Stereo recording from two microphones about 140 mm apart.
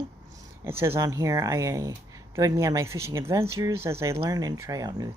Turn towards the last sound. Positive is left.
turn(degrees=-25)  # may be behind; listen again after turning